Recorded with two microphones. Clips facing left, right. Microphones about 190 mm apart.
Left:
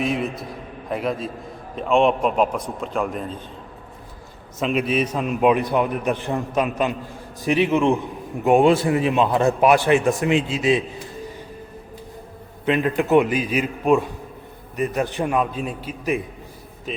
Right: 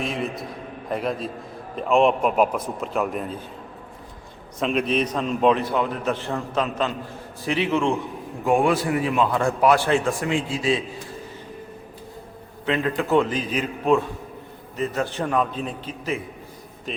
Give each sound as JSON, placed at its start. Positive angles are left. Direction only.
{"t": 0.0, "sound": "a man's voice", "side_deg": 0}
{"t": 4.6, "sound": "a man's voice", "side_deg": 5}
{"t": 12.6, "sound": "a man's voice", "side_deg": 15}